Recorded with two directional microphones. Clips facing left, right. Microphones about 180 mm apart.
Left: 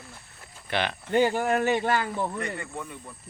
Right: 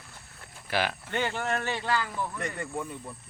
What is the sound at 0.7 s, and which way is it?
Speech, 5° right (ahead or behind).